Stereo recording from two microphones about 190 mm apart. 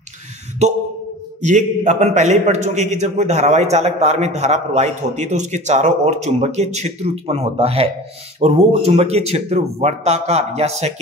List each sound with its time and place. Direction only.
1.4 s a man's voice: 40° right (ahead or behind)